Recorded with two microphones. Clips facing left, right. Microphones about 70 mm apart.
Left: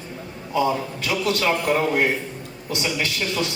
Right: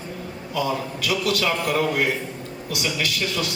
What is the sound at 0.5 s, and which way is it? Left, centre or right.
A man's voice, left.